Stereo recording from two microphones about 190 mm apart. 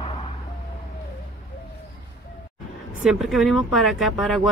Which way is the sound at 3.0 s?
Centre (ahead or behind).